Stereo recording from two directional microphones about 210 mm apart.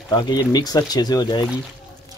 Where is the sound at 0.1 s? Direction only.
20° left (ahead or behind).